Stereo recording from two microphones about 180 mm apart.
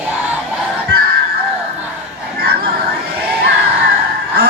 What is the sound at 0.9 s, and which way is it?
Music, 65° right (ahead or behind).